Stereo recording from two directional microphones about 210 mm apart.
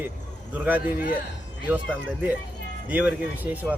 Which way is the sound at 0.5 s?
10° right (ahead or behind).